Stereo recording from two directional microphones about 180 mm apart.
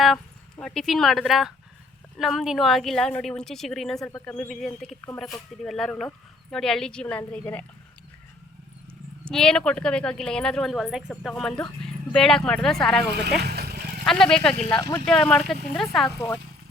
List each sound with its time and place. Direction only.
0.0 s speech: centre (ahead or behind)
9.3 s speech: 5° left (ahead or behind)
13.1 s speech: 65° right (ahead or behind)
14.0 s speech: 5° left (ahead or behind)
14.8 s speech: 20° left (ahead or behind)
15.0 s speech: 5° left (ahead or behind)